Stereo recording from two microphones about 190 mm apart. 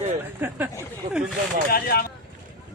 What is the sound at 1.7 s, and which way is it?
Speech, 55° left (ahead or behind).